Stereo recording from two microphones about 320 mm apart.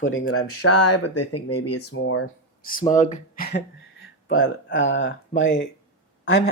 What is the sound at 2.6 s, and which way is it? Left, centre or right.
Speech, left.